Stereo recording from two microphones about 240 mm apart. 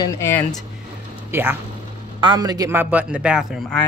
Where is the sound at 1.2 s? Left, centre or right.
Centre.